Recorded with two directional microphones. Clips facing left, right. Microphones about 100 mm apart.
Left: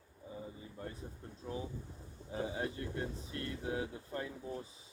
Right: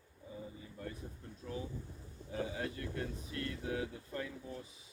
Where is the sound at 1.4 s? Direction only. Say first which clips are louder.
Left 1 dB; 15° left (ahead or behind).